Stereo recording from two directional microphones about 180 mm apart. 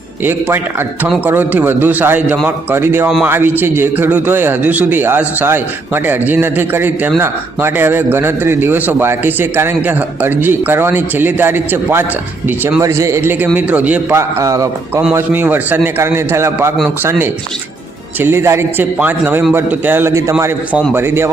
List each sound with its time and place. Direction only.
0.3 s a man's voice: 10° right (ahead or behind)